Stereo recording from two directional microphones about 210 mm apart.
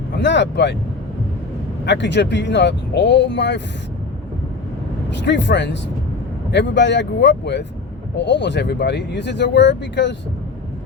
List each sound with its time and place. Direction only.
0.2 s speech: 55° left (ahead or behind)
1.8 s speech: 55° left (ahead or behind)
5.1 s speech: 55° left (ahead or behind)